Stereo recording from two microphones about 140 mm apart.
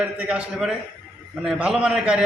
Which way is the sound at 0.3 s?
5° right (ahead or behind).